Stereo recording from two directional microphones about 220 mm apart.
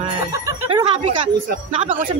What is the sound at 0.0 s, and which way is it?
Music, 15° right (ahead or behind).